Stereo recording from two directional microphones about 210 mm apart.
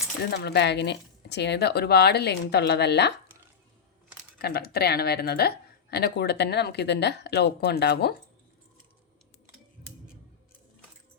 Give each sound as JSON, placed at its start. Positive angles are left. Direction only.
{"t": 0.3, "sound": "speech", "side_deg": 50}
{"t": 4.4, "sound": "speech", "side_deg": 50}